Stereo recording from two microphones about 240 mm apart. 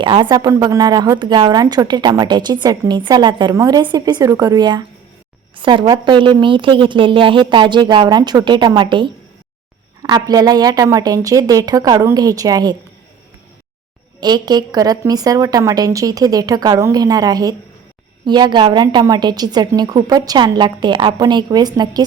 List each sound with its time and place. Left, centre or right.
0.0 s a woman's voice: centre
14.2 s a woman's voice: centre